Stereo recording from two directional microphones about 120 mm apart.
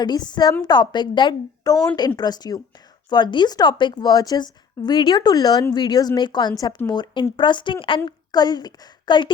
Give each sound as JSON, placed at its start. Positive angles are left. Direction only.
{"t": 0.0, "sound": "a woman's voice", "side_deg": 35}